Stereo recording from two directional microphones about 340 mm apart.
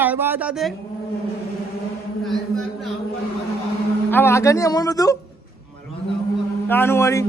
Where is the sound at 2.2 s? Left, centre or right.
Centre.